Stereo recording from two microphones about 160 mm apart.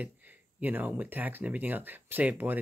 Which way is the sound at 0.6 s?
10° right (ahead or behind).